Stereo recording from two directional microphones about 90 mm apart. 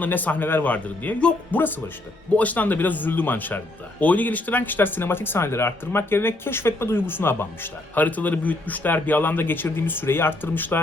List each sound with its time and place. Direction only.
0.0 s speech: 20° left (ahead or behind)